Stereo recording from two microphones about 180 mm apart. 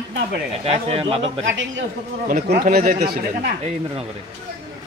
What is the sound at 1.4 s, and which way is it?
Speech, 90° right.